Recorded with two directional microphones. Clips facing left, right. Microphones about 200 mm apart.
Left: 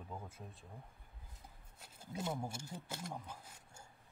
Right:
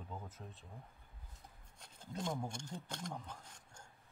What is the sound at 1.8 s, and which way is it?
Speech, 5° left (ahead or behind).